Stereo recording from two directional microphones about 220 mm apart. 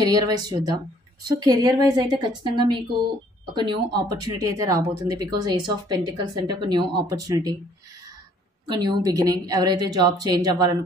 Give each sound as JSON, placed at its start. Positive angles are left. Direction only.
{"t": 0.0, "sound": "speech", "side_deg": -15}
{"t": 8.6, "sound": "speech", "side_deg": -20}